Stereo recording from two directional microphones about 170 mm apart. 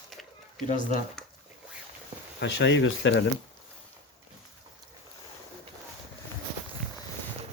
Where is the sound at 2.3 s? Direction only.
90° left.